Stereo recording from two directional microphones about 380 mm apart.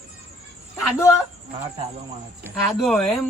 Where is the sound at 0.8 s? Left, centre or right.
Centre.